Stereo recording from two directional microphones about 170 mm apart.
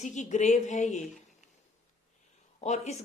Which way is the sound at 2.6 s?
40° left (ahead or behind).